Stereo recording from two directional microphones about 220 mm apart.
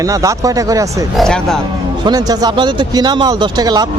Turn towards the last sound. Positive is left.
turn(degrees=-20)  # may be behind; listen again after turning